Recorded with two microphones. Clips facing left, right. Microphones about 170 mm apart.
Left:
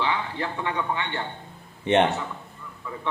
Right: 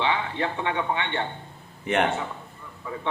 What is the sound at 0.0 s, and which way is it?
Speech, 20° right (ahead or behind).